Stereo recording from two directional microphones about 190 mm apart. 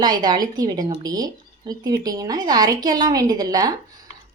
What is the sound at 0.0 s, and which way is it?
Speech, 20° right (ahead or behind).